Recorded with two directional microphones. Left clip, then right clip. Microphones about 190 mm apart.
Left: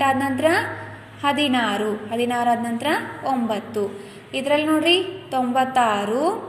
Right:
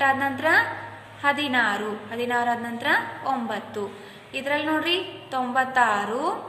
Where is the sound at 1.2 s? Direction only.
15° left (ahead or behind).